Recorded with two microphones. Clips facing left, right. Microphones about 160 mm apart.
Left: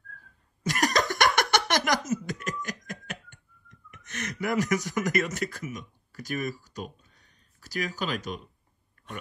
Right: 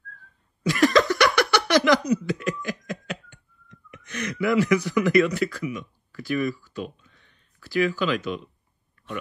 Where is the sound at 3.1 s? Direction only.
50° left (ahead or behind).